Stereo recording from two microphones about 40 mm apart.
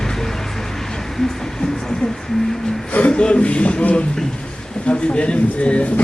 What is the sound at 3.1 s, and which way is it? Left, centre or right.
Speech, left.